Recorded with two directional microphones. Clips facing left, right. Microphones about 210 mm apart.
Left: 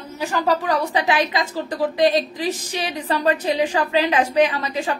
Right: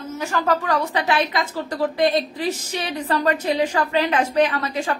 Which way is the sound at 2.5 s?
35° left (ahead or behind).